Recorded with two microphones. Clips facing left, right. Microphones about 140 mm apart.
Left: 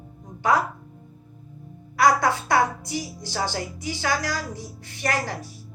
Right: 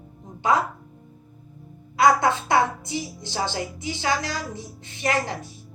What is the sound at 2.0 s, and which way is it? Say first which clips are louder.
Speech: right 1 dB; 20° right (ahead or behind).